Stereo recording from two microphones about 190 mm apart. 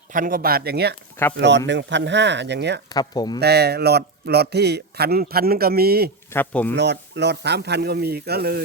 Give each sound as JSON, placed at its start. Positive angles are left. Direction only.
{"t": 0.1, "sound": "speech", "side_deg": -45}
{"t": 2.9, "sound": "speech", "side_deg": 20}
{"t": 3.4, "sound": "a man's voice", "side_deg": -60}
{"t": 6.3, "sound": "speech", "side_deg": 10}
{"t": 6.7, "sound": "a man's voice", "side_deg": -65}